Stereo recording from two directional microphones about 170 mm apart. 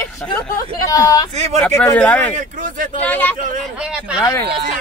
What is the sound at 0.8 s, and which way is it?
Speech, 20° left (ahead or behind).